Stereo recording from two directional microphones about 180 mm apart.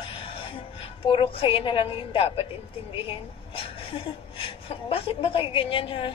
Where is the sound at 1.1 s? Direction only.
30° left (ahead or behind).